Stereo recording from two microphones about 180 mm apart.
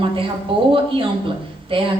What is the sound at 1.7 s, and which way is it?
Speech, 30° right (ahead or behind).